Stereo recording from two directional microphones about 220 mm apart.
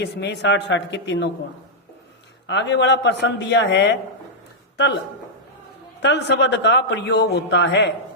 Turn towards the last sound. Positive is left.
turn(degrees=55)  # may be behind; listen again after turning